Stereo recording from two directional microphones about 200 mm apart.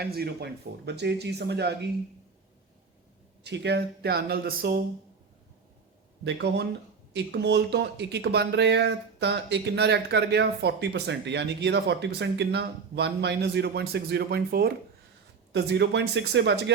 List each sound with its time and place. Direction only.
0.0 s speech: 50° right (ahead or behind)
3.4 s speech: 60° right (ahead or behind)
6.2 s speech: 60° right (ahead or behind)